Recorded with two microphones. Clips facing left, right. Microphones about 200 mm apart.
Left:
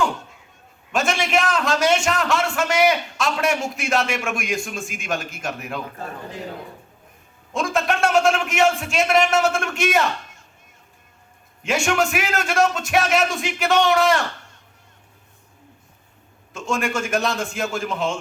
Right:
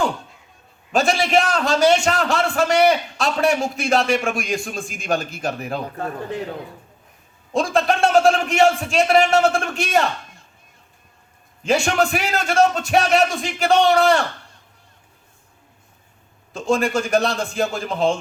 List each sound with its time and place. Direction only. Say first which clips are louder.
0.9 s a man's voice: right 3 dB; 35° right (ahead or behind)
7.5 s a man's voice: right 3 dB; 35° right (ahead or behind)
11.6 s a man's voice: right 2 dB; 35° right (ahead or behind)
16.5 s a man's voice: right 5 dB; 35° right (ahead or behind)